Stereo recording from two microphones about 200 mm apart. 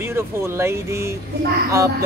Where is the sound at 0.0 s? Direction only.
10° right (ahead or behind).